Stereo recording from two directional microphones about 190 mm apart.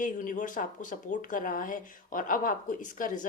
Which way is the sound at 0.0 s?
45° left (ahead or behind).